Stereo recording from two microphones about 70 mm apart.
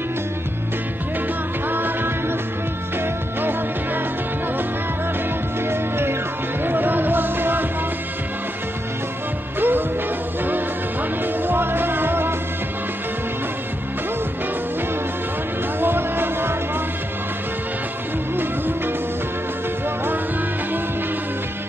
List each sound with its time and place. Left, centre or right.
1.7 s music: right
3.3 s music: right
5.7 s music: right
9.6 s music: right
11.4 s music: right
15.8 s music: right
18.3 s music: right